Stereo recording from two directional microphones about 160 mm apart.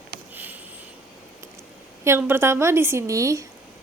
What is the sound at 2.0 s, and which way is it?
A woman's voice, 15° right (ahead or behind).